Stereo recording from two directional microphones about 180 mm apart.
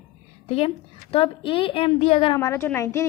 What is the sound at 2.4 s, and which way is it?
Speech, 15° left (ahead or behind).